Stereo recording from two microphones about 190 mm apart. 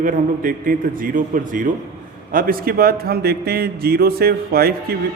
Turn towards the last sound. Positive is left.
turn(degrees=-55)  # may be behind; listen again after turning